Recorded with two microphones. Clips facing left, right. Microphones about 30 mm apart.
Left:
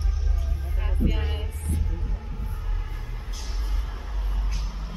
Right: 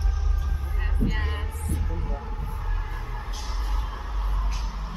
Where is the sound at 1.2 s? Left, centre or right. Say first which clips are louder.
Right 1 dB; centre.